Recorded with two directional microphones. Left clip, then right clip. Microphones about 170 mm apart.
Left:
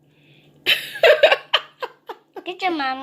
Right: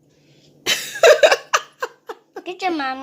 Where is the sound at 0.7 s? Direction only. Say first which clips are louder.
Right 2 dB; 45° right (ahead or behind).